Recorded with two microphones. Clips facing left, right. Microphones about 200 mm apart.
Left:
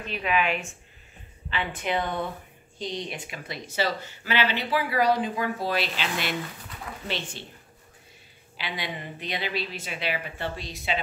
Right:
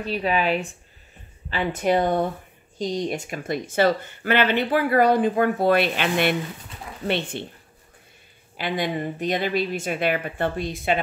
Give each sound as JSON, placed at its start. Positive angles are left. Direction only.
{"t": 0.0, "sound": "speech", "side_deg": -35}
{"t": 8.5, "sound": "speech", "side_deg": -50}